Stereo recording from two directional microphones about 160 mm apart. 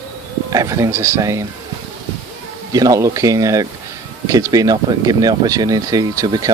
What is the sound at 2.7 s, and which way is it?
Speech, 20° right (ahead or behind).